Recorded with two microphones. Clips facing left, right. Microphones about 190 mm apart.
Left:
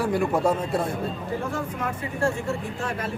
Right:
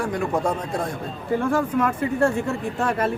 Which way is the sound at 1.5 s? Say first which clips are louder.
Right 8 dB; 60° right (ahead or behind).